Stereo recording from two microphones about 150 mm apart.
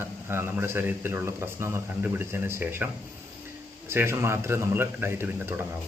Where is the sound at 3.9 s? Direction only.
15° right (ahead or behind).